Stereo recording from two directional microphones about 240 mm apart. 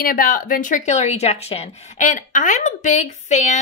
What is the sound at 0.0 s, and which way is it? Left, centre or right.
A woman's voice, left.